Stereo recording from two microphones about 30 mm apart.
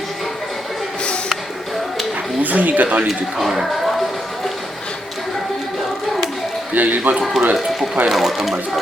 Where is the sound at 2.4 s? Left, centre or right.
Right.